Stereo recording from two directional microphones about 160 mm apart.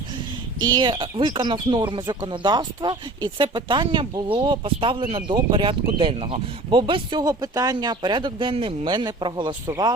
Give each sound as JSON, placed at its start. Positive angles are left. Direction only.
{"t": 0.6, "sound": "speech", "side_deg": -30}